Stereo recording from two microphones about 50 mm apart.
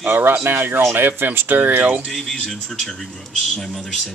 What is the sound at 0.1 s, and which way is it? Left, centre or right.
Speech, right.